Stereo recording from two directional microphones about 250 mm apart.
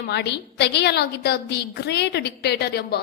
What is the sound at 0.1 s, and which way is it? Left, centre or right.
A woman's voice, left.